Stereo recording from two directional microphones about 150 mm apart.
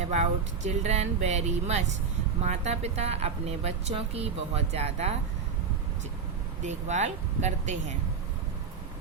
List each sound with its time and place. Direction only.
0.1 s a woman's voice: 50° right (ahead or behind)
6.6 s a woman's voice: 50° right (ahead or behind)